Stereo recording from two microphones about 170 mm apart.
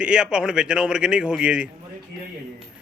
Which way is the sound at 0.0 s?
5° right (ahead or behind).